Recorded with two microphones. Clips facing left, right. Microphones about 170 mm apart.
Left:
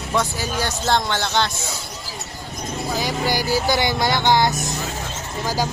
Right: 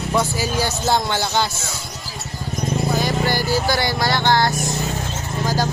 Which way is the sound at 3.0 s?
15° left (ahead or behind).